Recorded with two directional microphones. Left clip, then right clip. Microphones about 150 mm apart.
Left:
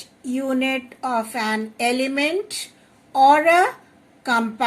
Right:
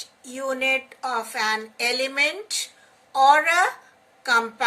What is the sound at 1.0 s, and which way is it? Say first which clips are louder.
A woman's voice: left 4 dB; 25° left (ahead or behind).